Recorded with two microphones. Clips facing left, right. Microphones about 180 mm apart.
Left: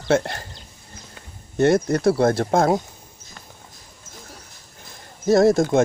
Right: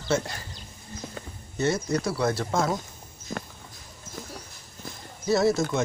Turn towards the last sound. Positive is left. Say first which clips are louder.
# left 7 dB
turn(degrees=50)  # may be behind; listen again after turning